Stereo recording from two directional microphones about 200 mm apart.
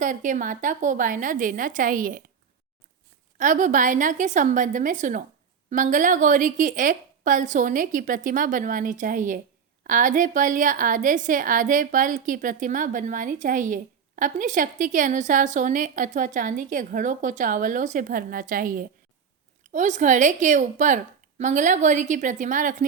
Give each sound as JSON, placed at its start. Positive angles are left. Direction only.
{"t": 0.0, "sound": "a woman's voice", "side_deg": -40}
{"t": 3.3, "sound": "a woman's voice", "side_deg": -40}